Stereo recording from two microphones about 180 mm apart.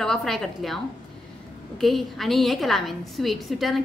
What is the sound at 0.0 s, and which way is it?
Speech, centre (ahead or behind).